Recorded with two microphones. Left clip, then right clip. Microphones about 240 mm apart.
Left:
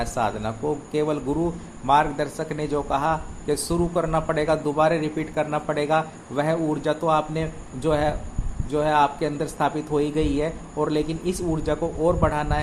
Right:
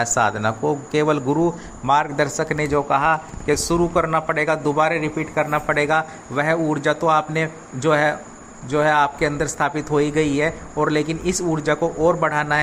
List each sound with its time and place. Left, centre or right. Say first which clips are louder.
0.0 s a man's voice: right 6 dB; centre